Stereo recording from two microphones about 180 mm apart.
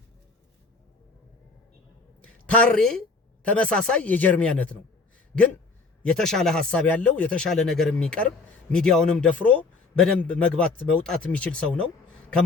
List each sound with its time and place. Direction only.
2.2 s a woman's voice: 5° left (ahead or behind)